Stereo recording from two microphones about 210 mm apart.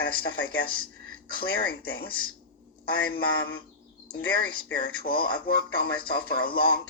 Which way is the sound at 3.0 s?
50° left (ahead or behind).